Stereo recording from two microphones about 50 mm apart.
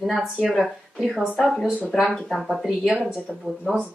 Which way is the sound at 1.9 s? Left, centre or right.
Centre.